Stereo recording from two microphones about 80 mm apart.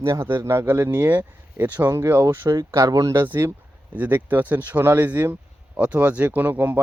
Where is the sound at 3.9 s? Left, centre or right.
Right.